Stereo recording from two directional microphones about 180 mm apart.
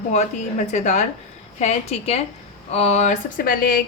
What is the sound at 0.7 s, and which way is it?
A woman's voice, 40° left (ahead or behind).